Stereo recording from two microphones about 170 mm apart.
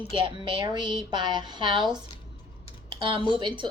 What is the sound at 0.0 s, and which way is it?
A woman's voice, 30° right (ahead or behind).